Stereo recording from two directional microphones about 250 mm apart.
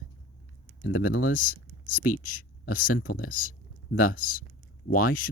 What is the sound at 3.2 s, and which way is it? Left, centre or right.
Speech, left.